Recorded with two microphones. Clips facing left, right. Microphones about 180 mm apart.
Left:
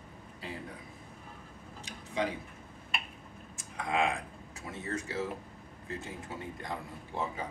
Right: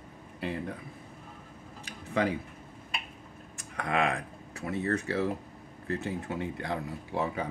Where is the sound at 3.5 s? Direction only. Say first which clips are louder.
Right 2 dB; 65° right (ahead or behind).